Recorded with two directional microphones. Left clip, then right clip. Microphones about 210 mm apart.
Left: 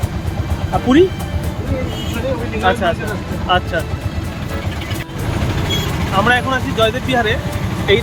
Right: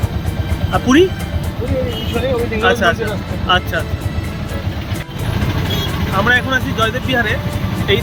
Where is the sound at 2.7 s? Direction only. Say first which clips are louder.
Right 1 dB; 5° right (ahead or behind).